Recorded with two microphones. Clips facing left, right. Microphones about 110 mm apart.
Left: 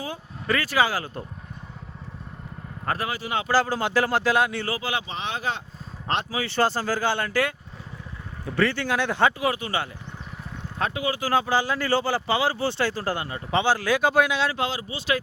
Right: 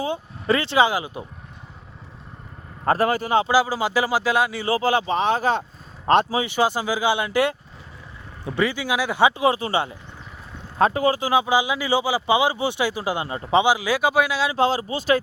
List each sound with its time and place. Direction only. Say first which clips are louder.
0.0 s speech: right 7 dB; 25° right (ahead or behind)
2.8 s speech: right 8 dB; 35° right (ahead or behind)
3.1 s speech: right 8 dB; 45° right (ahead or behind)
3.5 s speech: right 2 dB; 5° right (ahead or behind)
4.8 s speech: right 9 dB; 40° right (ahead or behind)
6.3 s speech: right 3 dB; 15° right (ahead or behind)
8.4 s speech: right 1 dB; 10° right (ahead or behind)
9.4 s speech: right 5 dB; 30° right (ahead or behind)
10.8 s speech: right 8 dB; 40° right (ahead or behind)
11.2 s speech: right 3 dB; 15° right (ahead or behind)
14.5 s speech: right 7 dB; 35° right (ahead or behind)